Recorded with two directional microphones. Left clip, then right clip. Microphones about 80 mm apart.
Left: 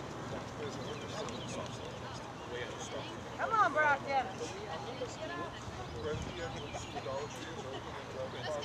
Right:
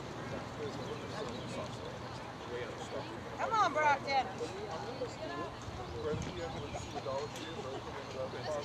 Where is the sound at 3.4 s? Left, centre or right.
Right.